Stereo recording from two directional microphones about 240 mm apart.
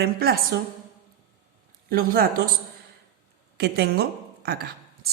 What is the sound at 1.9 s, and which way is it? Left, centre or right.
Speech, right.